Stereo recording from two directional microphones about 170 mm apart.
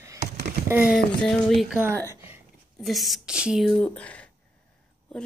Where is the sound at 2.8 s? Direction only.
Centre (ahead or behind).